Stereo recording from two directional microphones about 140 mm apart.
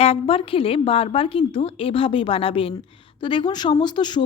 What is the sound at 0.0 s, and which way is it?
A woman's voice, 45° left (ahead or behind).